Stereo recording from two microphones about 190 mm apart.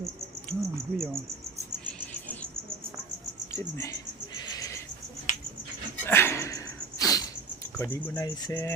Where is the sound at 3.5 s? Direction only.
15° left (ahead or behind).